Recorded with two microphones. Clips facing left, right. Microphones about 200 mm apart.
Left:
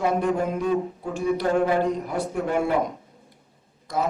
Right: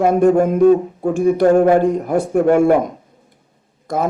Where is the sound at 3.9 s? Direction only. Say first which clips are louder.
Right 6 dB; 50° right (ahead or behind).